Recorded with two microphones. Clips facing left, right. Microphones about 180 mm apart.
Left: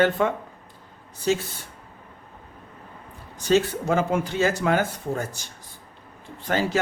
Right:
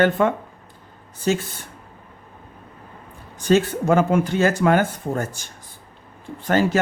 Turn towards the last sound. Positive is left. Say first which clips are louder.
# right 5 dB
turn(degrees=-50)  # may be behind; listen again after turning